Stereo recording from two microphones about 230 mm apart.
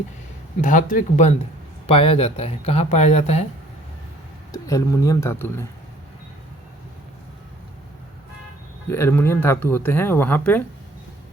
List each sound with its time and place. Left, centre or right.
0.6 s speech: left
4.5 s speech: centre
8.9 s speech: centre